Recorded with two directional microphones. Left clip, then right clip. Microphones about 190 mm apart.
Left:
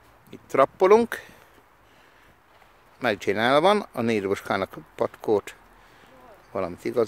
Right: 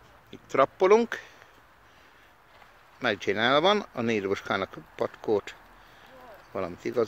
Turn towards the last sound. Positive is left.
turn(degrees=20)  # may be behind; listen again after turning